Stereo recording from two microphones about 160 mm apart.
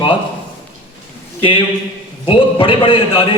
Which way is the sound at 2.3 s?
35° left (ahead or behind).